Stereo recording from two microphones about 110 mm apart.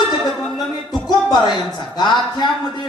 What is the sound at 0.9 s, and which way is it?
Music, 40° left (ahead or behind).